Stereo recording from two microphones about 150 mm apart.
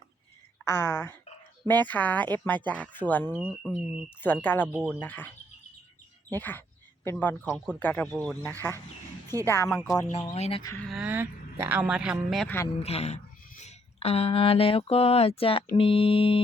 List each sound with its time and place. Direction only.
0.6 s speech: 15° left (ahead or behind)
3.3 s speech: 5° right (ahead or behind)
4.2 s speech: 10° left (ahead or behind)
6.3 s speech: 10° left (ahead or behind)
10.1 s speech: 45° left (ahead or behind)
10.8 s speech: centre (ahead or behind)
11.0 s speech: 15° right (ahead or behind)
12.8 s speech: 45° left (ahead or behind)
15.7 s music: 40° left (ahead or behind)